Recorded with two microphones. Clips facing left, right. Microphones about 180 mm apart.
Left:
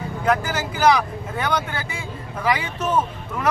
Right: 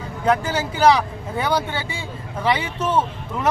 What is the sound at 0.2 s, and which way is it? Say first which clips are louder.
A man's voice: right 2 dB; 30° right (ahead or behind).